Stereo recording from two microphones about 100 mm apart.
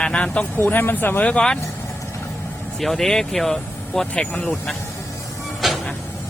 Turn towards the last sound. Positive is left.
turn(degrees=-5)  # may be behind; listen again after turning